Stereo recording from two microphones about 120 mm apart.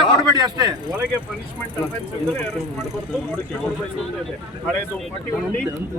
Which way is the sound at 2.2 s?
5° left (ahead or behind).